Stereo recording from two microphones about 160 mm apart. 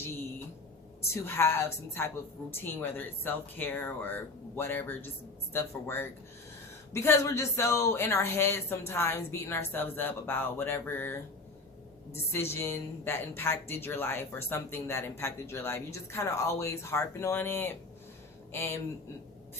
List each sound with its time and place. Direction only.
1.1 s a woman's voice: 15° left (ahead or behind)